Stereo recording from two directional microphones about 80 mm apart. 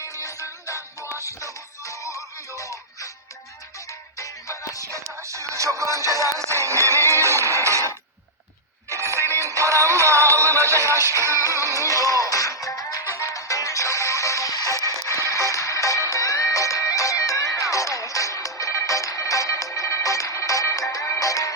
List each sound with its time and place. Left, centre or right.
0.0 s music: left
4.2 s music: left
4.8 s music: right
11.4 s music: left